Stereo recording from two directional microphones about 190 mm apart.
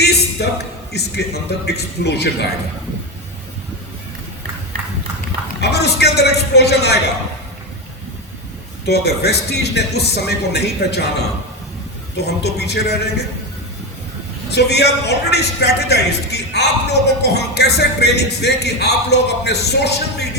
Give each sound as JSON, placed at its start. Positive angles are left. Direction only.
{"t": 0.0, "sound": "a sound", "side_deg": 60}
{"t": 0.9, "sound": "a man's voice", "side_deg": 60}
{"t": 5.5, "sound": "a man's voice", "side_deg": 60}
{"t": 8.9, "sound": "a man's voice", "side_deg": 60}
{"t": 12.1, "sound": "a man's voice", "side_deg": 60}
{"t": 14.5, "sound": "a man's voice", "side_deg": 60}